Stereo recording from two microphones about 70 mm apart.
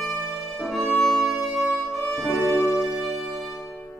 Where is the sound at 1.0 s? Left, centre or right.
Centre.